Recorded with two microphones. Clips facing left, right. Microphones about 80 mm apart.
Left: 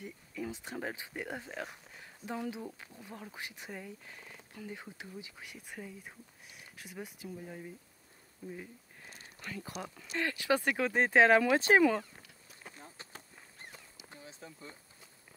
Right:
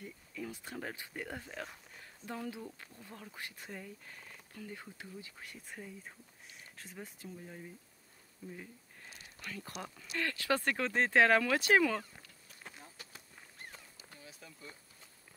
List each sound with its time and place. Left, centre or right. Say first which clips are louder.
0.0 s speech: left 3 dB; left
9.7 s speech: left 2 dB; centre
10.1 s speech: left 3 dB; centre
12.7 s a sound: left 3 dB; left